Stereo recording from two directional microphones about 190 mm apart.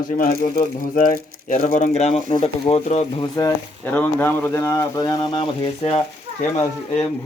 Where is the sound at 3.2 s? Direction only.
20° left (ahead or behind).